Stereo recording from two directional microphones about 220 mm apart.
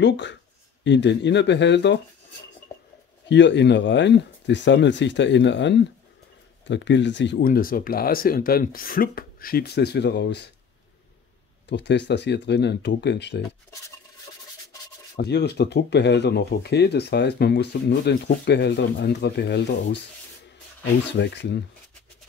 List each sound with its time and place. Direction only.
0.0 s speech: 55° left (ahead or behind)
3.3 s speech: 55° left (ahead or behind)
11.7 s speech: 50° left (ahead or behind)
15.1 s speech: 50° left (ahead or behind)
21.1 s speech: 50° left (ahead or behind)